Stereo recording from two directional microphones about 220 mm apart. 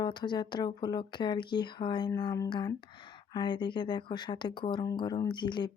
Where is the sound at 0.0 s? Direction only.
20° left (ahead or behind).